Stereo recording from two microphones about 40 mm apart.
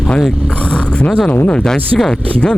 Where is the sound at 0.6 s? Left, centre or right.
Left.